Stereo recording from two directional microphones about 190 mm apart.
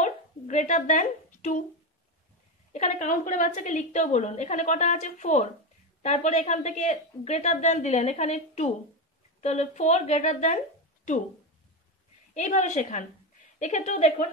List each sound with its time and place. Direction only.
0.0 s dog: 40° left (ahead or behind)
2.7 s a woman's voice: 40° left (ahead or behind)
12.4 s a woman's voice: 40° left (ahead or behind)